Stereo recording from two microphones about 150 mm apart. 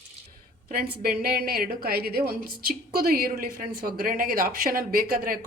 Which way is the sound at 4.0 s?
70° right (ahead or behind).